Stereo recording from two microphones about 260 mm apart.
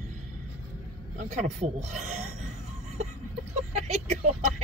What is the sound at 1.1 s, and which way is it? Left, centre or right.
Speech, right.